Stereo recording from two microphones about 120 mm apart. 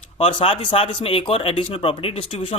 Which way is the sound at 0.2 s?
45° left (ahead or behind).